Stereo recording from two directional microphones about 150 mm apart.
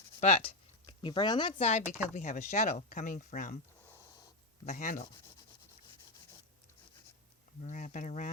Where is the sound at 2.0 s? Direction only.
55° left (ahead or behind).